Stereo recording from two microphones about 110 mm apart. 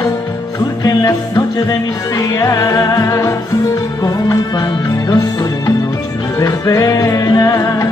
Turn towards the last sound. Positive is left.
turn(degrees=30)  # may be behind; listen again after turning